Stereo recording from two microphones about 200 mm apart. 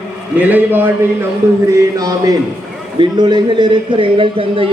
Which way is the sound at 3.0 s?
20° right (ahead or behind).